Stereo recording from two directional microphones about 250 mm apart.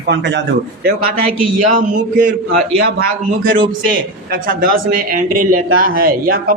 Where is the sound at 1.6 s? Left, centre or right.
Right.